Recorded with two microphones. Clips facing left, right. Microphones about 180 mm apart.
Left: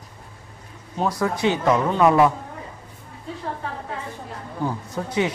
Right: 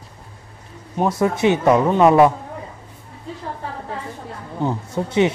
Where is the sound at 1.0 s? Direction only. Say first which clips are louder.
Right 4 dB; 25° right (ahead or behind).